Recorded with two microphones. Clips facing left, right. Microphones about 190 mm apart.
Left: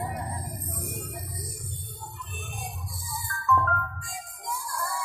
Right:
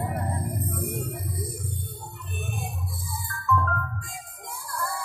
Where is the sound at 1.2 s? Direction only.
55° right (ahead or behind).